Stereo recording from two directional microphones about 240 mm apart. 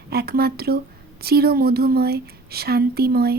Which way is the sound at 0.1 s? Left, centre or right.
Right.